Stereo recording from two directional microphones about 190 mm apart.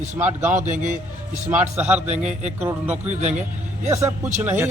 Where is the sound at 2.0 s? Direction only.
35° right (ahead or behind).